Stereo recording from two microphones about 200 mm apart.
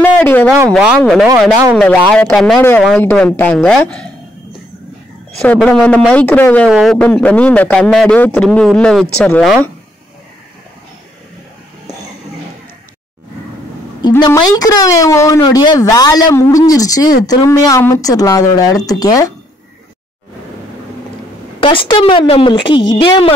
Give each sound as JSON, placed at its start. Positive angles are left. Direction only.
{"t": 0.0, "sound": "a sound", "side_deg": 10}
{"t": 0.7, "sound": "a man's voice", "side_deg": -5}
{"t": 5.4, "sound": "a man's voice", "side_deg": 0}
{"t": 14.0, "sound": "a woman's voice", "side_deg": 20}
{"t": 21.5, "sound": "speech", "side_deg": 25}